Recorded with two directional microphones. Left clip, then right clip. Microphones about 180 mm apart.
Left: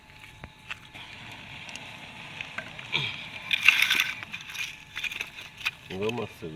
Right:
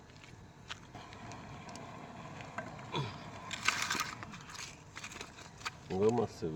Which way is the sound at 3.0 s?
15° right (ahead or behind).